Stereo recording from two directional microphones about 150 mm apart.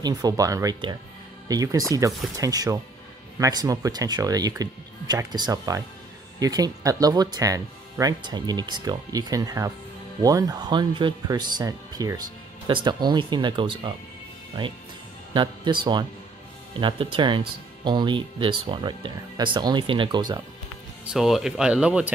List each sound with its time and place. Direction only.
0.0 s speech: 25° right (ahead or behind)
15.3 s speech: 30° right (ahead or behind)
21.1 s speech: centre (ahead or behind)